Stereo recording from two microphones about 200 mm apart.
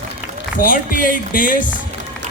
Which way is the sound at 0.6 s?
40° left (ahead or behind).